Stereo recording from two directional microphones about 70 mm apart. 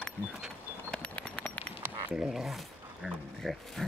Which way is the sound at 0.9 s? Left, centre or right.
Centre.